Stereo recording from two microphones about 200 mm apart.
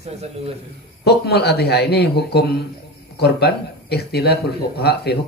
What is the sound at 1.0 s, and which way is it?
Speech, 55° left (ahead or behind).